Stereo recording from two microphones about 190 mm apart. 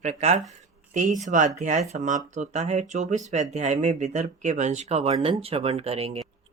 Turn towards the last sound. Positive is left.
turn(degrees=-30)  # may be behind; listen again after turning